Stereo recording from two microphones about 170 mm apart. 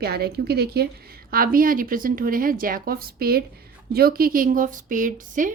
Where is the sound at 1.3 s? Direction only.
55° right (ahead or behind).